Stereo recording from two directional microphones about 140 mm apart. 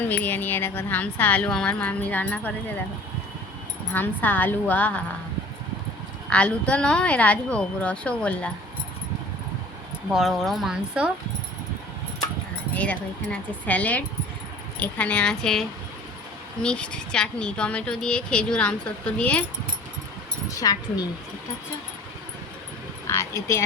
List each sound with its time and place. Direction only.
0.0 s speech: 10° left (ahead or behind)
3.9 s speech: 15° left (ahead or behind)
6.3 s speech: 10° left (ahead or behind)
10.1 s speech: centre (ahead or behind)
12.7 s speech: 10° left (ahead or behind)
16.6 s speech: 5° left (ahead or behind)
20.6 s speech: 25° left (ahead or behind)
23.0 s speech: 20° left (ahead or behind)